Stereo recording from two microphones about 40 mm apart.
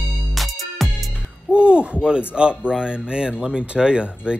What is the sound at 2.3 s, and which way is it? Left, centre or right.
Speech, right.